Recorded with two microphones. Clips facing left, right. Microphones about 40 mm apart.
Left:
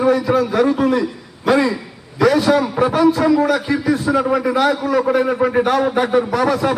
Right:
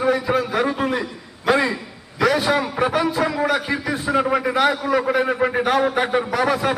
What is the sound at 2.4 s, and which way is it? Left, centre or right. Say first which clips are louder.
A man's voice: left 4 dB; right.